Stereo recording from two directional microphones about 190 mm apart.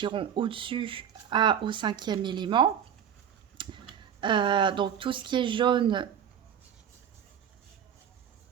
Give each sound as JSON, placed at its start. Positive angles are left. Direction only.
{"t": 0.0, "sound": "speech", "side_deg": -25}